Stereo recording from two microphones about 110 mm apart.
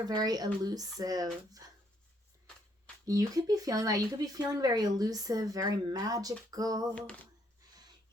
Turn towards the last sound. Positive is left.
turn(degrees=-35)  # may be behind; listen again after turning